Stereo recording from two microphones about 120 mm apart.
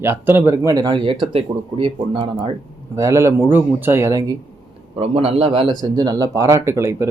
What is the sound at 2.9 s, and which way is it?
Speech, 25° right (ahead or behind).